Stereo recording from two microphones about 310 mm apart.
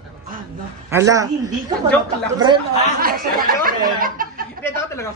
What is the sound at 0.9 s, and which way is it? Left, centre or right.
Speech, centre.